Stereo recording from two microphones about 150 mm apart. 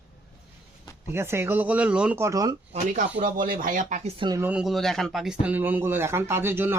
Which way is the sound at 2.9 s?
65° right (ahead or behind).